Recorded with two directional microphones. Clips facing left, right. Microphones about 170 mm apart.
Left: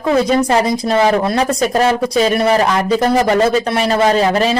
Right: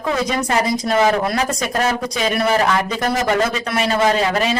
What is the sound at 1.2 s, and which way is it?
Speech, 30° left (ahead or behind).